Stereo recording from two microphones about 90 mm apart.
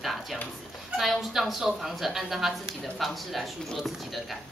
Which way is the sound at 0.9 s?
5° right (ahead or behind).